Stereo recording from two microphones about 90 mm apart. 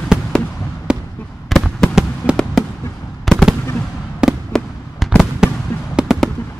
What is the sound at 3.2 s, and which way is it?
Fireworks, centre (ahead or behind).